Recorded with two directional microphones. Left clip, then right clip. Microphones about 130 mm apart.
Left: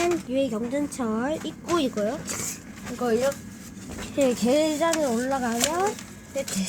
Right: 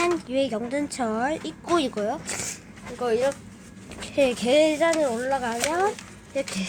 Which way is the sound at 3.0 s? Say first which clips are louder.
Right 1 dB; 15° right (ahead or behind).